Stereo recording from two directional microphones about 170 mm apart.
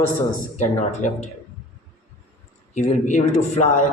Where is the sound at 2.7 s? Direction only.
45° left (ahead or behind).